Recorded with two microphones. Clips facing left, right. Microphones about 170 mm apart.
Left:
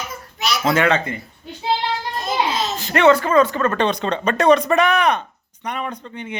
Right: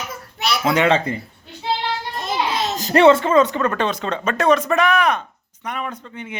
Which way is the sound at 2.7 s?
35° right (ahead or behind).